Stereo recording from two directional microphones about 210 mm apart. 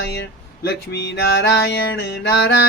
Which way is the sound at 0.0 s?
50° left (ahead or behind).